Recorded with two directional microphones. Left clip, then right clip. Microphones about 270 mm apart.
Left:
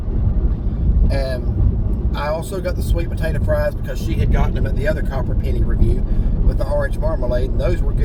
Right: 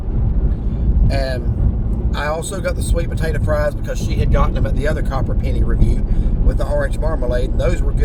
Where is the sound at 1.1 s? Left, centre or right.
Centre.